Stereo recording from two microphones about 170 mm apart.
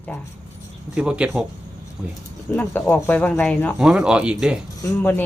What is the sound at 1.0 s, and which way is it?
Speech, 5° right (ahead or behind).